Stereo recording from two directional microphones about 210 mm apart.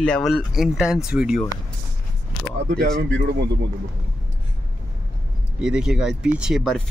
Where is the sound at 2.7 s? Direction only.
50° right (ahead or behind).